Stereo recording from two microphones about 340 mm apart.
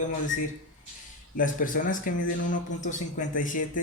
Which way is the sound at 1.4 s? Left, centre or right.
Left.